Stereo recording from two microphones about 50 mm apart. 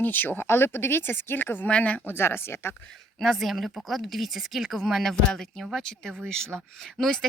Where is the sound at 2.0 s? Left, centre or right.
Left.